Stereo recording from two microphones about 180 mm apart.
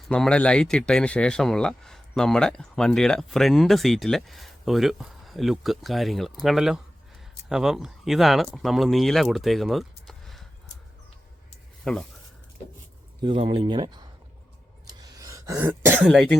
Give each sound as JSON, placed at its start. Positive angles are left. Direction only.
{"t": 0.1, "sound": "speech", "side_deg": 5}
{"t": 11.9, "sound": "speech", "side_deg": 5}
{"t": 13.2, "sound": "speech", "side_deg": -30}
{"t": 14.8, "sound": "throat clearing", "side_deg": -20}